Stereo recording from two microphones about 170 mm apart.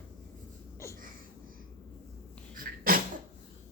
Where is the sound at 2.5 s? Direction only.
55° right (ahead or behind).